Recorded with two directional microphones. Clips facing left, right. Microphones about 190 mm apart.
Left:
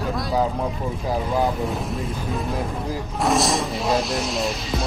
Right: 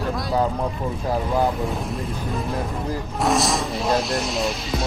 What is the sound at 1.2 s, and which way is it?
Music, centre (ahead or behind).